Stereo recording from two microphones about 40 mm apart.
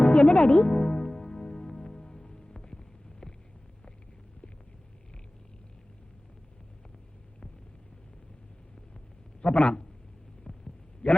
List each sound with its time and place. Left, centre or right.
0.0 s music: left
9.4 s a man's voice: left
10.4 s heart sounds: centre